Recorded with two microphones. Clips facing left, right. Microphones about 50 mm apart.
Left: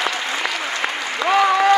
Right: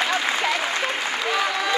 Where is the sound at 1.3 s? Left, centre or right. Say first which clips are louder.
Left 11 dB; left.